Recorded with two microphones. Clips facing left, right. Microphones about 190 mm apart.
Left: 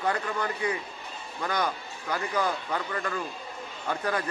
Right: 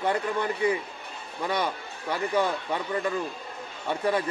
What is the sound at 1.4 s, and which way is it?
A man's voice, 30° right (ahead or behind).